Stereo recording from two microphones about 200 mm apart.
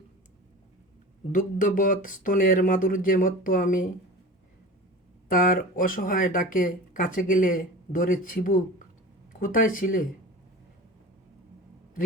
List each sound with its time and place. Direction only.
1.3 s speech: 40° left (ahead or behind)
5.3 s speech: 45° left (ahead or behind)